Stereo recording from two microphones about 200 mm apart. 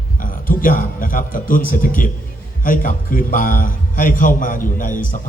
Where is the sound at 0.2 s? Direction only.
45° left (ahead or behind).